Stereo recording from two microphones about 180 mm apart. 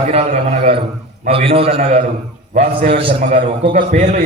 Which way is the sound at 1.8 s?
50° right (ahead or behind).